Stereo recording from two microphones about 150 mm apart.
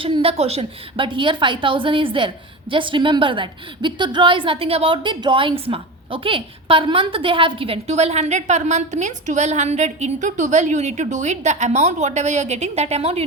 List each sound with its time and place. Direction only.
0.0 s a woman's voice: 35° right (ahead or behind)